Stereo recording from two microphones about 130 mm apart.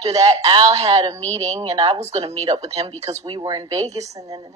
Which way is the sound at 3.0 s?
25° right (ahead or behind).